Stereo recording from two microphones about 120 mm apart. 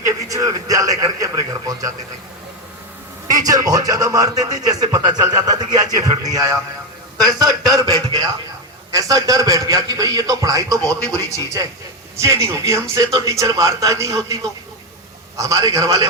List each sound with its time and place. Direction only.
0.0 s a man's voice: 30° right (ahead or behind)
3.2 s a man's voice: 30° right (ahead or behind)